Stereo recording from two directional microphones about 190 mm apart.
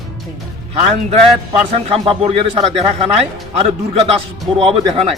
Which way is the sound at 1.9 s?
30° right (ahead or behind).